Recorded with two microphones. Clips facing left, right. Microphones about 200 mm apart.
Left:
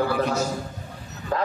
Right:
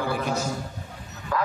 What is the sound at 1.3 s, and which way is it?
Bow-wow, 30° left (ahead or behind).